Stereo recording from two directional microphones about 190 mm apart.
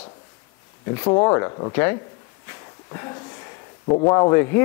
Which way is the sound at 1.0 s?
20° left (ahead or behind).